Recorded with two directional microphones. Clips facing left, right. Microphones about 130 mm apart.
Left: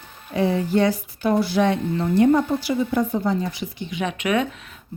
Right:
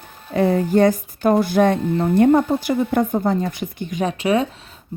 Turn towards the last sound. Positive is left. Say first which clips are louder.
# right 3 dB
turn(degrees=-30)  # may be behind; listen again after turning